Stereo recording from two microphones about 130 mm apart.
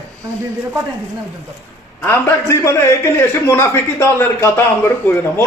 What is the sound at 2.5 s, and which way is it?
A man's voice, 20° left (ahead or behind).